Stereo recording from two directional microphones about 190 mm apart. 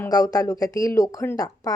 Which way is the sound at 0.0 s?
20° left (ahead or behind).